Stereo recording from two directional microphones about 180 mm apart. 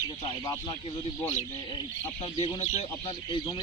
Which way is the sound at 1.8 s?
30° left (ahead or behind).